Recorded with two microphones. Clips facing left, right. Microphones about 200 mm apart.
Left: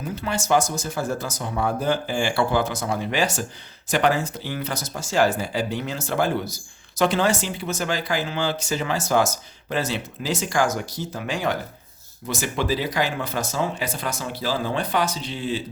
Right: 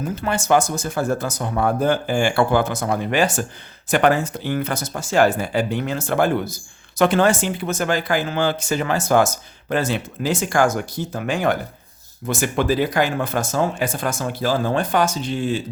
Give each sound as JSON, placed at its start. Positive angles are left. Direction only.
{"t": 0.0, "sound": "speech", "side_deg": -55}